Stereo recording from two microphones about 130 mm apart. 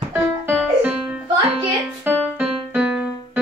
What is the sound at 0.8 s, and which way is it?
Music, 10° right (ahead or behind).